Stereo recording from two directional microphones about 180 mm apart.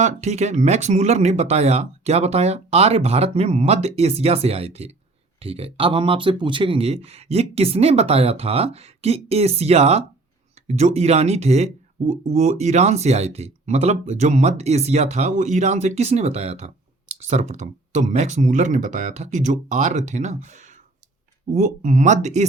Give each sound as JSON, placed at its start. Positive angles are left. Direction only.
{"t": 0.0, "sound": "speech", "side_deg": -40}